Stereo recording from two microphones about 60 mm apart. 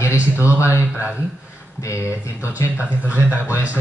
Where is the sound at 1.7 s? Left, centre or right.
Left.